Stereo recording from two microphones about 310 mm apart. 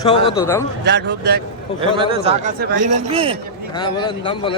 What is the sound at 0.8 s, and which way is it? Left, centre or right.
Speech, right.